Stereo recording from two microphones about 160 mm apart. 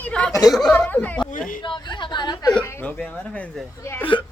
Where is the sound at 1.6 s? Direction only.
30° left (ahead or behind).